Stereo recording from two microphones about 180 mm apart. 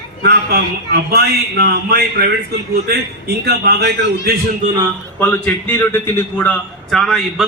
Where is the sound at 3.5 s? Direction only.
65° right (ahead or behind).